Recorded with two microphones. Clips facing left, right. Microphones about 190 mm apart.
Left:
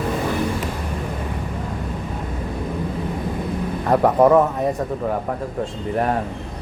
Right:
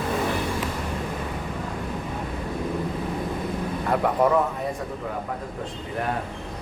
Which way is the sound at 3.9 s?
45° left (ahead or behind).